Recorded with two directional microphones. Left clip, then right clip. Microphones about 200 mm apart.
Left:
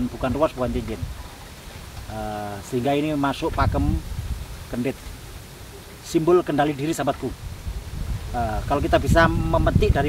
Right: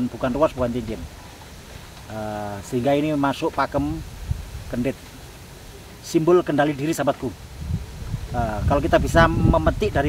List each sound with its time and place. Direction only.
0.2 s speech: 15° right (ahead or behind)
2.1 s speech: 15° right (ahead or behind)
6.0 s speech: 15° right (ahead or behind)
8.4 s speech: 15° right (ahead or behind)